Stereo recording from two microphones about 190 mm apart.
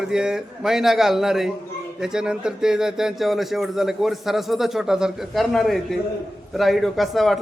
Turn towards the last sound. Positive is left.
turn(degrees=0)  # may be behind; listen again after turning